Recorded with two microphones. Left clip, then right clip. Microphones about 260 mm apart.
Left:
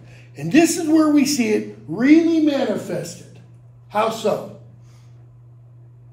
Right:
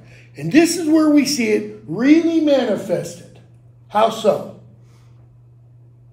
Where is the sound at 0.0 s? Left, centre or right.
Centre.